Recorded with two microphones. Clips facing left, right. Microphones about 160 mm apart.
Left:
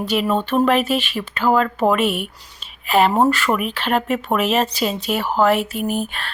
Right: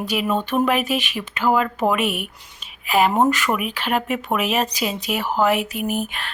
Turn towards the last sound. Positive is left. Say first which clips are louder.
# left 2 dB
turn(degrees=-15)  # may be behind; listen again after turning